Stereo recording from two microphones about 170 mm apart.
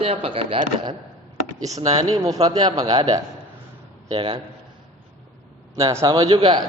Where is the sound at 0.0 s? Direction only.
35° right (ahead or behind).